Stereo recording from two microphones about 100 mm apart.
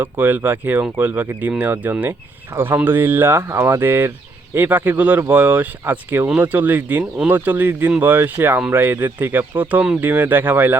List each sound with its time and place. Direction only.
0.0 s speech: 15° right (ahead or behind)